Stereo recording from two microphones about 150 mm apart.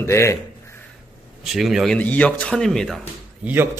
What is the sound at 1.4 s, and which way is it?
Speech, centre (ahead or behind).